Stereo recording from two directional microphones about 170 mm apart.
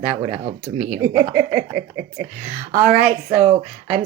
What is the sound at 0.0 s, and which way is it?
Speech, 40° right (ahead or behind).